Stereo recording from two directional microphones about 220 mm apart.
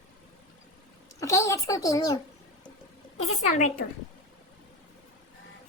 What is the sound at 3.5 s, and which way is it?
Speech, 35° left (ahead or behind).